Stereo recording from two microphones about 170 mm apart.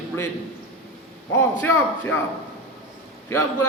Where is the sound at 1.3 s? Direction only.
15° left (ahead or behind).